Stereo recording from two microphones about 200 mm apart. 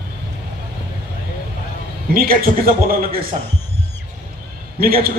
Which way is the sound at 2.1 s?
45° right (ahead or behind).